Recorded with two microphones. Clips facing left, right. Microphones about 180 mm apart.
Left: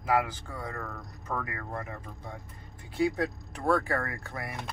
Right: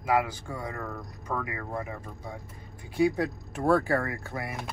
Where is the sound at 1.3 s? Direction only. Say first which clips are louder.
Right 3 dB; 10° right (ahead or behind).